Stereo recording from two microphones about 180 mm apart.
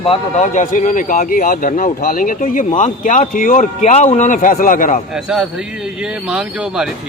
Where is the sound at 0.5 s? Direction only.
45° left (ahead or behind).